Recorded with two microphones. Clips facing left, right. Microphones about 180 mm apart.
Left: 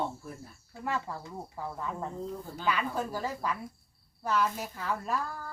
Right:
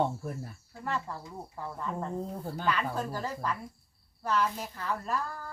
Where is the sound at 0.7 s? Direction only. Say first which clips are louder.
Left 1 dB; 10° left (ahead or behind).